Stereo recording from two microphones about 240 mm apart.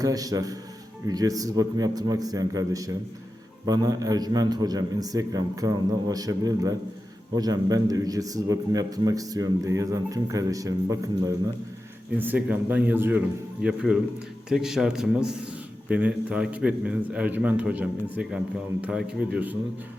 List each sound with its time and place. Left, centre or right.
0.0 s a man's voice: centre